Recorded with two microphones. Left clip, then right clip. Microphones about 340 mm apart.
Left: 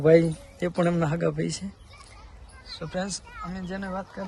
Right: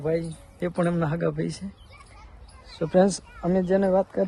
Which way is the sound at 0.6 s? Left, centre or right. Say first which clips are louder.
Left 1 dB; centre.